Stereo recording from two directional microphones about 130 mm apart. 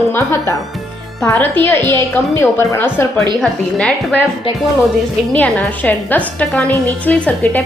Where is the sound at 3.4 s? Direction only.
5° left (ahead or behind).